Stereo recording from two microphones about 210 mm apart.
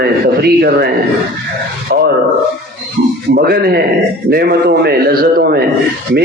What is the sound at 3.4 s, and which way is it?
A man's voice, 50° right (ahead or behind).